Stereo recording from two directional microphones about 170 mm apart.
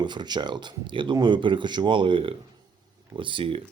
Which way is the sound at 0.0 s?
25° right (ahead or behind).